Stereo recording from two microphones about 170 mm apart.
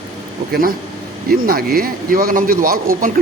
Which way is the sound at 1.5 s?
60° right (ahead or behind).